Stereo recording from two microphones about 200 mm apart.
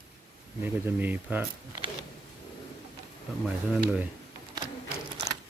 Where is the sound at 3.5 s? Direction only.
5° right (ahead or behind).